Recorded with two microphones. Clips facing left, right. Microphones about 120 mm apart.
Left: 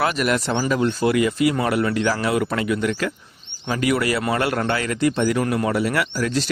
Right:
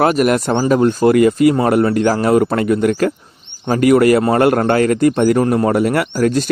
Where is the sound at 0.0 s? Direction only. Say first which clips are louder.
Right 7 dB; 45° right (ahead or behind).